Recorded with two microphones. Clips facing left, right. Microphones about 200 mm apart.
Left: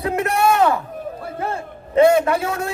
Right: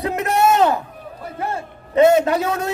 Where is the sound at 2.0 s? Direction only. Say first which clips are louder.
Right 1 dB; 20° right (ahead or behind).